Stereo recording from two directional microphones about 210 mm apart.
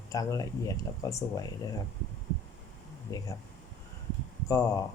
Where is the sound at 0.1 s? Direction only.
15° left (ahead or behind).